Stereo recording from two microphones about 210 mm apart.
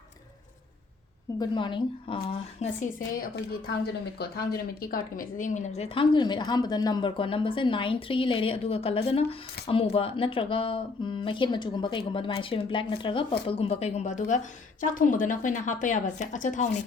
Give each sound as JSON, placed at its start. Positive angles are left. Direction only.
{"t": 1.4, "sound": "a woman's voice", "side_deg": 20}
{"t": 4.2, "sound": "a woman's voice", "side_deg": 50}